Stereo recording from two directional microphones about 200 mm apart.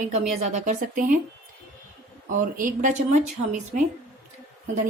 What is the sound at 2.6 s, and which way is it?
A woman's voice, 40° right (ahead or behind).